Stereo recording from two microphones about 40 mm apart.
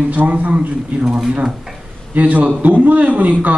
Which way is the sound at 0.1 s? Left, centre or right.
Right.